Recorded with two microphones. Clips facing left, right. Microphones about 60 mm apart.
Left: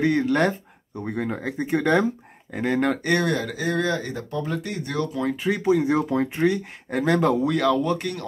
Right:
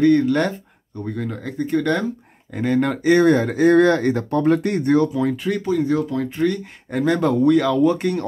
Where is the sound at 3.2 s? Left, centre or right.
Right.